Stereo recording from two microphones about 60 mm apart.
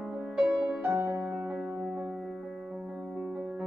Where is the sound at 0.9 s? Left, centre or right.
Right.